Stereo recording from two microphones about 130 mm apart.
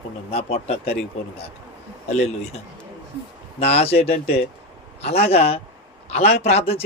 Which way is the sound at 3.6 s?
50° left (ahead or behind).